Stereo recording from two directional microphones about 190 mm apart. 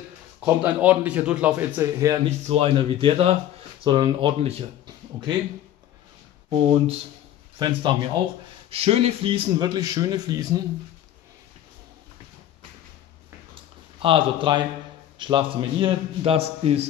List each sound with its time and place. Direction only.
0.7 s speech: 5° right (ahead or behind)
2.2 s a man's voice: 35° right (ahead or behind)
6.5 s a man's voice: 30° right (ahead or behind)
13.6 s a sound: 25° right (ahead or behind)
15.1 s a man's voice: 25° right (ahead or behind)